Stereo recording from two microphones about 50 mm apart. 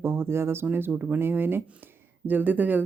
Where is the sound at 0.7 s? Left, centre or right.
Right.